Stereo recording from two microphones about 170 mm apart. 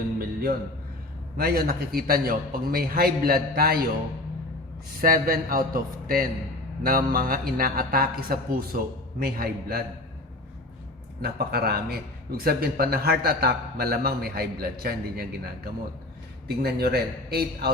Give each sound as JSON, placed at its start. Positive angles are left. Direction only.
{"t": 1.4, "sound": "a man's voice", "side_deg": -65}
{"t": 4.9, "sound": "a man's voice", "side_deg": -55}
{"t": 11.2, "sound": "a man's voice", "side_deg": -65}